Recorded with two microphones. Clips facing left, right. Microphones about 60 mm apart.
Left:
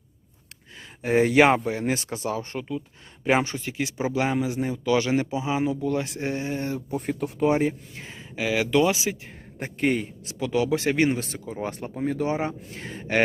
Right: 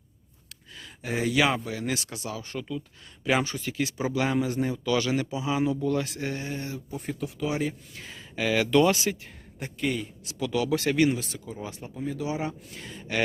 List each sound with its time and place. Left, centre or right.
0.8 s a man's voice: left
4.4 s a man's voice: centre; by 6.7 s left
6.7 s speech: left
7.6 s a man's voice: left
8.4 s speech: centre
9.6 s speech: left